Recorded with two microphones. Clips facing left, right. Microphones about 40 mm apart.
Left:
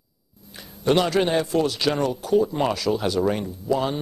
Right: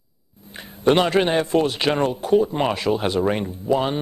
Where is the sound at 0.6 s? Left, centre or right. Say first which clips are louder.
Right 3 dB; right.